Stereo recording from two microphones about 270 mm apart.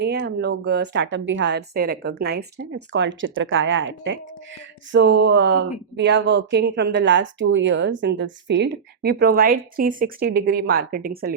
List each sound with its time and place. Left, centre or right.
0.0 s speech: right